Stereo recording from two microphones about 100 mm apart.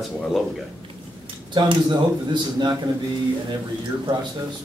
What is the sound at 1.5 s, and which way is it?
Speech, 50° right (ahead or behind).